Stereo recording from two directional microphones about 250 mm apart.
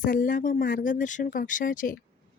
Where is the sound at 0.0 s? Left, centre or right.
Left.